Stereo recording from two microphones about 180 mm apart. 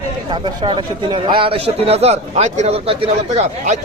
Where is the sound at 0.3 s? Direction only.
25° right (ahead or behind).